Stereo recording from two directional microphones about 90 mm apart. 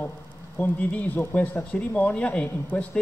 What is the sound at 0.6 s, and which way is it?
Speech, 20° left (ahead or behind).